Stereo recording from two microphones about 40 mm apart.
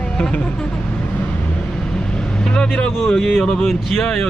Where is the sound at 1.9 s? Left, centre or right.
Left.